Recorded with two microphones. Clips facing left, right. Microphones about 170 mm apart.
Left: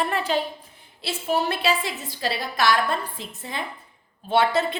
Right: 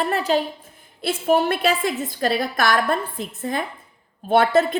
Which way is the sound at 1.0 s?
50° right (ahead or behind).